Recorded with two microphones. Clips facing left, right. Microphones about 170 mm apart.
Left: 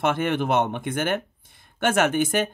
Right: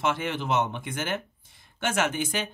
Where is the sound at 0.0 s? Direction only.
55° left (ahead or behind).